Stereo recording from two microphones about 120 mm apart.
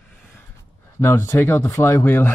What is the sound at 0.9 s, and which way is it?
Speech, 20° left (ahead or behind).